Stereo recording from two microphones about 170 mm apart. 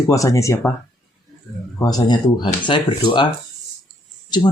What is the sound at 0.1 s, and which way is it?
Speech, 20° left (ahead or behind).